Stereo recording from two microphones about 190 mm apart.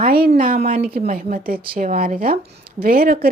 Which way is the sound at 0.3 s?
50° right (ahead or behind).